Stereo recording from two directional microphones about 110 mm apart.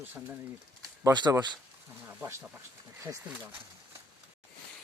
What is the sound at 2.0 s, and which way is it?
Speech, 25° right (ahead or behind).